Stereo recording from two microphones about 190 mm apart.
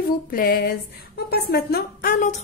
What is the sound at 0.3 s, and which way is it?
A woman's voice, 50° left (ahead or behind).